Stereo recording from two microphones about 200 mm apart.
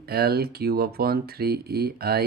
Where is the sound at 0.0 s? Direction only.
50° right (ahead or behind).